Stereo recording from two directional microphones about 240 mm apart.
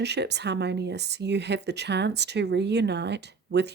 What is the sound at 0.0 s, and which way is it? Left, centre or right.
Speech, right.